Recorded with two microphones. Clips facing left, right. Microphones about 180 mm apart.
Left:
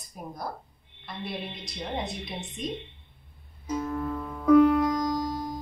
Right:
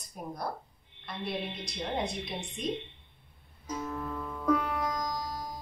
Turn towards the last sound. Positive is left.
turn(degrees=-10)  # may be behind; listen again after turning